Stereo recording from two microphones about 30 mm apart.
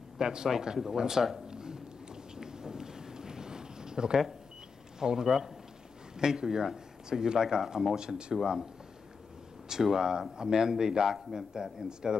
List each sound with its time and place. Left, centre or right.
0.2 s speech: right
2.3 s a sound: right
4.9 s speech: centre
8.0 s speech: right
9.7 s speech: centre
11.1 s a man's voice: centre
11.3 s speech: centre